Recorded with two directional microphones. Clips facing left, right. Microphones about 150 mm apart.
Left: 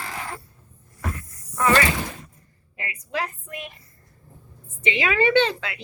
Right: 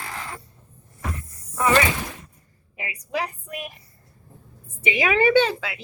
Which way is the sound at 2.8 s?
10° right (ahead or behind).